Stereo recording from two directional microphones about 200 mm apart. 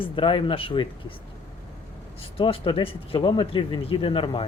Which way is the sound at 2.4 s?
25° left (ahead or behind).